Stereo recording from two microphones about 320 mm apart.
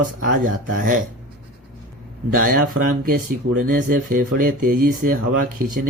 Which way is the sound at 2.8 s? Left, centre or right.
Right.